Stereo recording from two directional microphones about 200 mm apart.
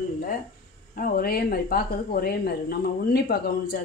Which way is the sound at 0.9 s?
45° left (ahead or behind).